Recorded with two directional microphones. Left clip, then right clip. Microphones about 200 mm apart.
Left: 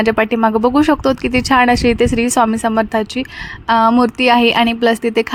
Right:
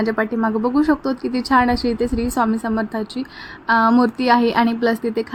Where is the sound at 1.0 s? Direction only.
90° left.